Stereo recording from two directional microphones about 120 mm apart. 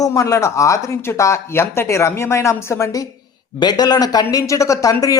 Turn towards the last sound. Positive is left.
turn(degrees=25)  # may be behind; listen again after turning